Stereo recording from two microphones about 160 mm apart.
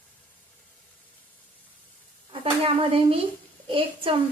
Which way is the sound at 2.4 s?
35° right (ahead or behind).